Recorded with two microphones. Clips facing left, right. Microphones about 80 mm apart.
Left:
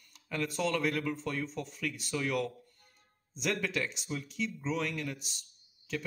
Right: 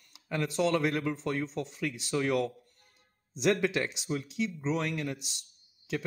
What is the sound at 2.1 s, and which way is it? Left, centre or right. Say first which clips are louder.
Speech: right 5 dB; right.